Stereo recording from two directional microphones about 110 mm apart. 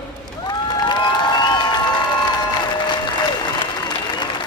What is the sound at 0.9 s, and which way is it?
Cheering, 40° left (ahead or behind).